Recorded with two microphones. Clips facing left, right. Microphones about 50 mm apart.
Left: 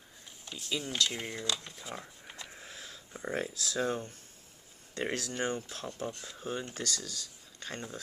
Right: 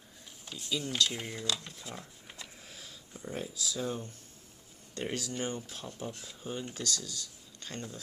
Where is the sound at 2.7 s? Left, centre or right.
Left.